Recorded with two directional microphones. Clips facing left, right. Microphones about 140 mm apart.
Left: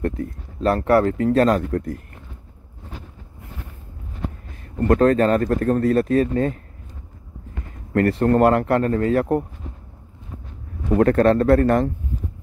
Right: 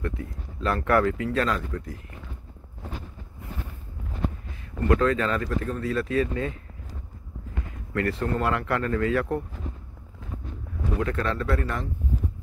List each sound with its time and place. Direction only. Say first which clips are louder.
0.0 s speech: left 8 dB; 40° left (ahead or behind)
4.8 s speech: left 7 dB; 45° left (ahead or behind)
7.9 s speech: left 9 dB; 45° left (ahead or behind)
11.0 s speech: left 13 dB; 50° left (ahead or behind)